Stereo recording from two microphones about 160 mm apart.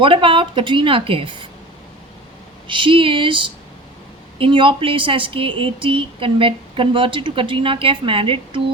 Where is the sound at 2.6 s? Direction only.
30° right (ahead or behind).